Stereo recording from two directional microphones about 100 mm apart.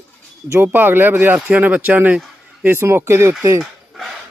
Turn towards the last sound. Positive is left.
turn(degrees=-30)  # may be behind; listen again after turning